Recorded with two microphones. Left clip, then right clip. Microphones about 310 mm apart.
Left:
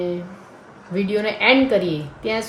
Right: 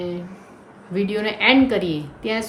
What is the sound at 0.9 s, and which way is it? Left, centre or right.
Speech, centre.